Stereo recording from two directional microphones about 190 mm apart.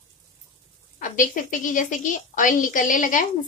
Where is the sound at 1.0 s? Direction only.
45° left (ahead or behind).